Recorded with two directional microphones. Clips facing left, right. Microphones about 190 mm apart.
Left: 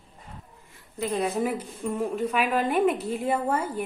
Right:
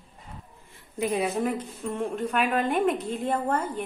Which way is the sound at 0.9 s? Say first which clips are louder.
Right 1 dB; 15° right (ahead or behind).